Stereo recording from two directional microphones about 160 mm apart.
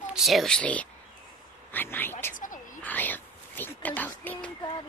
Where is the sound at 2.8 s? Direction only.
10° left (ahead or behind).